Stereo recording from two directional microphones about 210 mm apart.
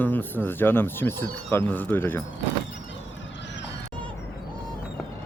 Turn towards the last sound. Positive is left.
turn(degrees=60)  # may be behind; listen again after turning